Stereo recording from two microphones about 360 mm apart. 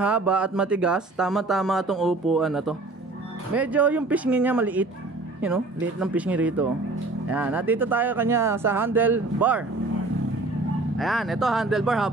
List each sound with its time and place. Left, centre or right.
0.0 s speech: centre
11.0 s speech: centre